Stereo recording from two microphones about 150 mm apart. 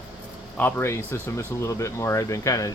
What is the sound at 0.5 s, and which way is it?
Speech, 15° left (ahead or behind).